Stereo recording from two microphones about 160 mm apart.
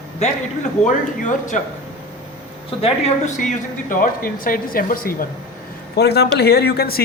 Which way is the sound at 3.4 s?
55° left (ahead or behind).